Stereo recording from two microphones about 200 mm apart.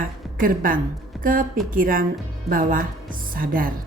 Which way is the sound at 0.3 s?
45° right (ahead or behind).